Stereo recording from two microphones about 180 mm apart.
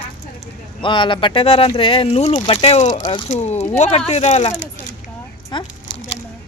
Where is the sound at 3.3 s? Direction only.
40° left (ahead or behind).